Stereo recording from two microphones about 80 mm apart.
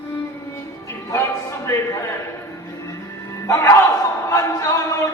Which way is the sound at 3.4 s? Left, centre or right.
Left.